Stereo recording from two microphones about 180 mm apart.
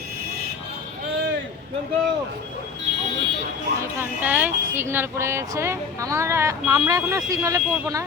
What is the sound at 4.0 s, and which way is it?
Speech, 10° right (ahead or behind).